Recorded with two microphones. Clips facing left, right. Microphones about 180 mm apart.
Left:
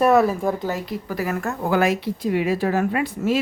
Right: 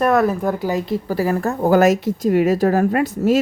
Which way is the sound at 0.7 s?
30° right (ahead or behind).